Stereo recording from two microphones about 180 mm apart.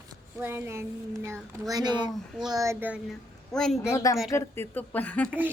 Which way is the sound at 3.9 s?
15° left (ahead or behind).